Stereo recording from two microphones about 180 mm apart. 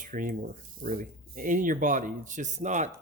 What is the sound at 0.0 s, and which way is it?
Speech, 50° right (ahead or behind).